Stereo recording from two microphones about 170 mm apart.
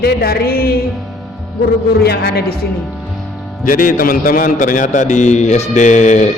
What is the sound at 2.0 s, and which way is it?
Speech, 70° left (ahead or behind).